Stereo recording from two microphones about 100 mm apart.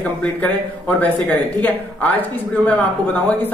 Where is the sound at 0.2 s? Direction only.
15° left (ahead or behind).